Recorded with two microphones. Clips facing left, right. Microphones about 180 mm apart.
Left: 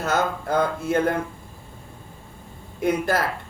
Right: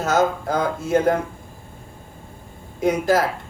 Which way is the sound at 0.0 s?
60° left (ahead or behind).